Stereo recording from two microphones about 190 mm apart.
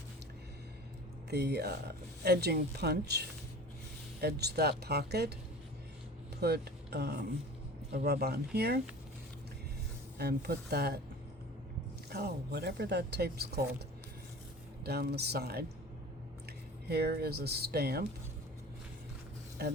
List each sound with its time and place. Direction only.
1.3 s speech: 60° right (ahead or behind)
6.4 s speech: 60° right (ahead or behind)
10.2 s speech: 55° right (ahead or behind)
12.0 s speech: 55° right (ahead or behind)
14.8 s speech: 55° right (ahead or behind)
16.9 s speech: 55° right (ahead or behind)